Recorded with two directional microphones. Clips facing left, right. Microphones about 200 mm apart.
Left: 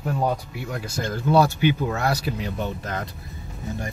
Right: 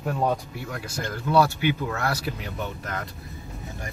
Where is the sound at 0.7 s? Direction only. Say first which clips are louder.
Left 4 dB; 20° left (ahead or behind).